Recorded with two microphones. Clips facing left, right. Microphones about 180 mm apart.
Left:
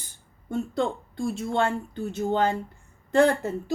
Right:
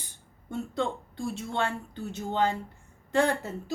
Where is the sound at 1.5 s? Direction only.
50° left (ahead or behind).